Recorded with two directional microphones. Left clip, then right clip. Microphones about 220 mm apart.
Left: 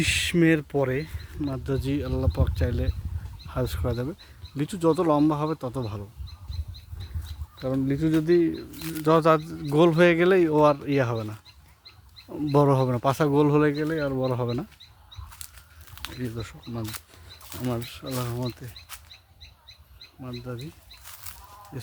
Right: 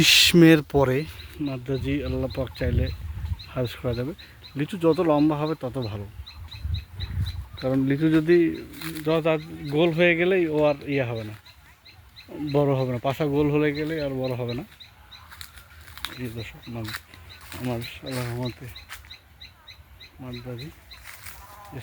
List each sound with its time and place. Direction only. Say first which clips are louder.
0.0 s speech: right 7 dB; 25° right (ahead or behind)
1.5 s speech: even; centre (ahead or behind)
7.6 s speech: right 3 dB; 10° right (ahead or behind)
8.4 s speech: right 2 dB; centre (ahead or behind)
9.0 s speech: left 3 dB; 25° left (ahead or behind)
15.9 s a sound: right 4 dB; 5° right (ahead or behind)
16.2 s speech: even; 15° left (ahead or behind)
18.1 s speech: even; 5° left (ahead or behind)